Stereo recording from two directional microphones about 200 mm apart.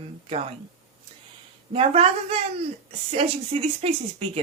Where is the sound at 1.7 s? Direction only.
30° right (ahead or behind).